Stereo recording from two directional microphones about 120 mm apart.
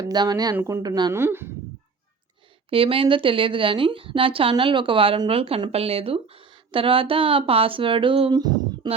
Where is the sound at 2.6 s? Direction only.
50° right (ahead or behind).